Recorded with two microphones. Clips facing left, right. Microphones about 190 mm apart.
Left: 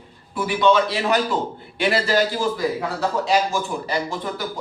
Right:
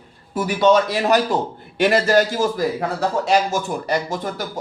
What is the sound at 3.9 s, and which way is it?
Speech, 45° right (ahead or behind).